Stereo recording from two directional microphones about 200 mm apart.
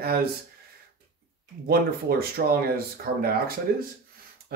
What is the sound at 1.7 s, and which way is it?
Speech, 50° right (ahead or behind).